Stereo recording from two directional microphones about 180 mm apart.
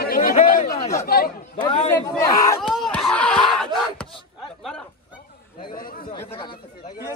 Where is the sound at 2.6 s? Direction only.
Centre (ahead or behind).